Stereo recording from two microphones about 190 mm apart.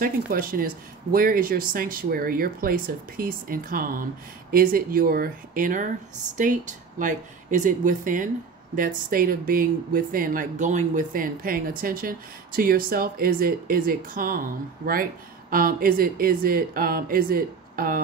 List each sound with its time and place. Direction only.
0.0 s speech: 50° right (ahead or behind)